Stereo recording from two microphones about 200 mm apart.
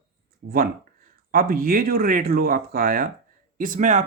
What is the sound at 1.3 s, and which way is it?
Speech, 50° right (ahead or behind).